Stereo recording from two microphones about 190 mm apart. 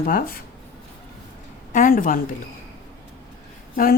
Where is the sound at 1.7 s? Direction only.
45° left (ahead or behind).